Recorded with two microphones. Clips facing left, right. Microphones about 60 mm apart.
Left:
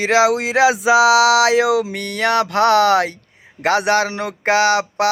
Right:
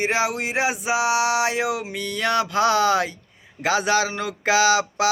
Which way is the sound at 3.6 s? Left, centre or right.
Left.